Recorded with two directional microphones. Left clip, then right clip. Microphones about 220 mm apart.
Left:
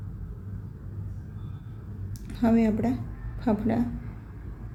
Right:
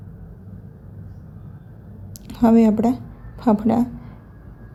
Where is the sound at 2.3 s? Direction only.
30° right (ahead or behind).